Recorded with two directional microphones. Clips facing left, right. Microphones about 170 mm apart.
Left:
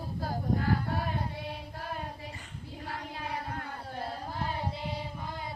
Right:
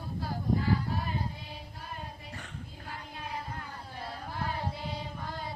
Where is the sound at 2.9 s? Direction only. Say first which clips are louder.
Left 3 dB; 75° left (ahead or behind).